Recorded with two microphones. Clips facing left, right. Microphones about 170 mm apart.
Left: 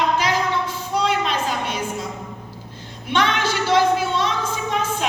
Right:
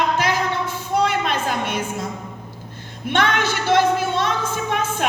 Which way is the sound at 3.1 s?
50° right (ahead or behind).